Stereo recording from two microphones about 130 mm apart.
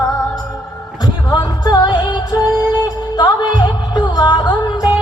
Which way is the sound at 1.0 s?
30° left (ahead or behind).